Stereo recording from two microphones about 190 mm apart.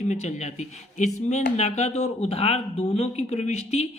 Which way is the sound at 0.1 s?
35° left (ahead or behind).